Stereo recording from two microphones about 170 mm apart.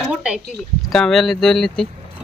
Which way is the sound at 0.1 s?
5° right (ahead or behind).